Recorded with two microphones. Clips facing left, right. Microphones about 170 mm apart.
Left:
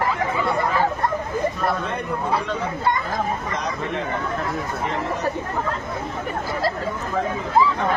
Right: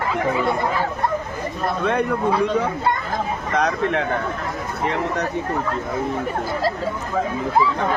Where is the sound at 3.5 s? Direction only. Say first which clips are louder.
Right 6 dB; 65° right (ahead or behind).